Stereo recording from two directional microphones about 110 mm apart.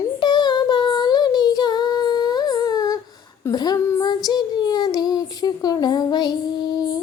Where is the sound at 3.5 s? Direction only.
35° left (ahead or behind).